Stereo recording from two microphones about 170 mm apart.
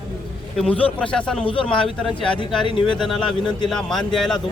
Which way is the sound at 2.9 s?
Centre (ahead or behind).